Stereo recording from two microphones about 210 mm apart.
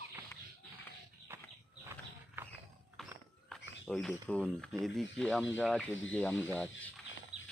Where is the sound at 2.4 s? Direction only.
10° right (ahead or behind).